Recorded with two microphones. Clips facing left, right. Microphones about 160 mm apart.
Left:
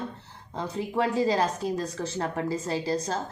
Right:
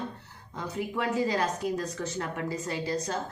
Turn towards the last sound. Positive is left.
turn(degrees=30)  # may be behind; listen again after turning